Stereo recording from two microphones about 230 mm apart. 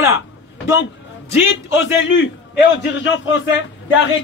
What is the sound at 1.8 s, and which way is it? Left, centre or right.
A man's voice, left.